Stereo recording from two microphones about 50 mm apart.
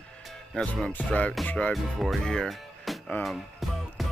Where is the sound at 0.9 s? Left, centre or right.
Left.